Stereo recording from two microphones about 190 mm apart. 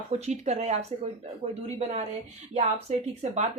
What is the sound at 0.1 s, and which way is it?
Speech, 35° right (ahead or behind).